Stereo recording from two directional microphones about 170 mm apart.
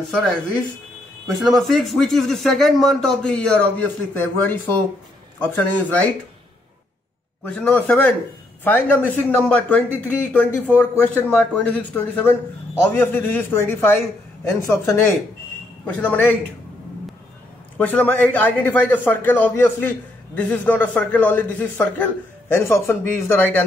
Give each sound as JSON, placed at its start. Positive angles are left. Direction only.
{"t": 1.2, "sound": "a man's voice", "side_deg": 0}
{"t": 7.4, "sound": "a man's voice", "side_deg": 10}
{"t": 17.7, "sound": "a man's voice", "side_deg": 10}